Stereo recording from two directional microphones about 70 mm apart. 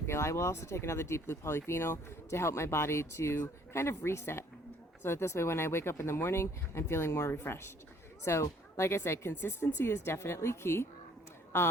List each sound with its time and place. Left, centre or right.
0.1 s speech: left